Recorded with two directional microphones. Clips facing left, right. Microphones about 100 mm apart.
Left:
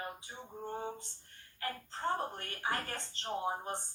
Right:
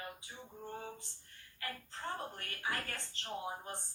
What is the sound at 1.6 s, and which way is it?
Speech, 35° left (ahead or behind).